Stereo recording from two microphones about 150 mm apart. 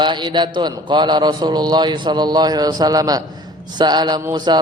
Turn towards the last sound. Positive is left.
turn(degrees=-30)  # may be behind; listen again after turning